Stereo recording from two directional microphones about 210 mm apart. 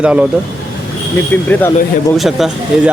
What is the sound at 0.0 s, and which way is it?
Speech, 5° right (ahead or behind).